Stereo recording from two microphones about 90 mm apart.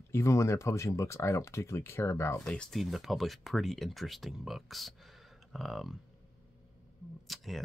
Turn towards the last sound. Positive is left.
turn(degrees=0)  # may be behind; listen again after turning